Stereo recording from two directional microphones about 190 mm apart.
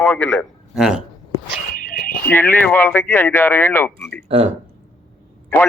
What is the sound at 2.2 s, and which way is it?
Speech, 10° left (ahead or behind).